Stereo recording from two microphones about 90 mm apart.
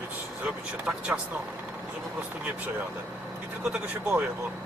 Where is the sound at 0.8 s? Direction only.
15° right (ahead or behind).